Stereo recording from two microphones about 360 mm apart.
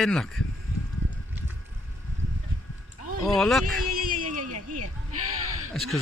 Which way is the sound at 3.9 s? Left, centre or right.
Right.